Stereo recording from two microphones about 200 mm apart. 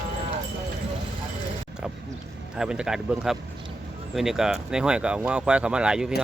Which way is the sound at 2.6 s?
5° right (ahead or behind).